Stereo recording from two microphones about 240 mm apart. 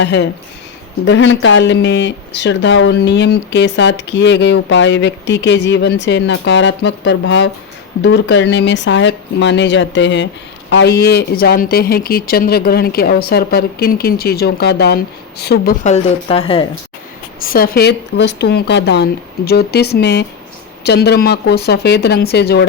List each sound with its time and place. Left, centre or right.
0.0 s speech: left
15.8 s speech: left
17.4 s speech: left